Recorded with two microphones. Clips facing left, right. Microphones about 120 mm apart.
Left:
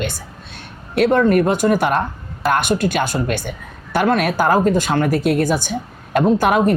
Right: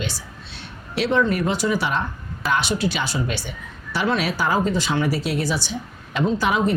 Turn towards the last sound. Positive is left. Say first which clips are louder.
# left 6 dB
turn(degrees=55)  # may be behind; listen again after turning